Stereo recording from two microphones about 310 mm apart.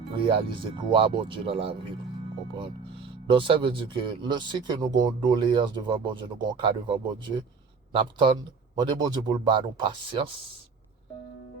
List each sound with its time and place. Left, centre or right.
0.2 s speech: centre